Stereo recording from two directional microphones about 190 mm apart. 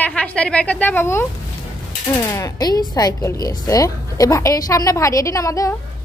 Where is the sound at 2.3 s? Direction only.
20° left (ahead or behind).